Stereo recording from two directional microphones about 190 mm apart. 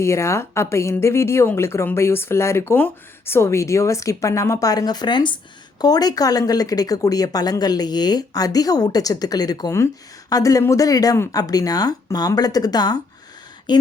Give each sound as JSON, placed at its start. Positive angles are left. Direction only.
{"t": 0.0, "sound": "a woman's voice", "side_deg": 15}